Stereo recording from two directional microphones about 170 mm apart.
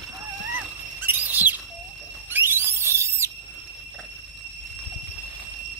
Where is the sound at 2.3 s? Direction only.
15° right (ahead or behind).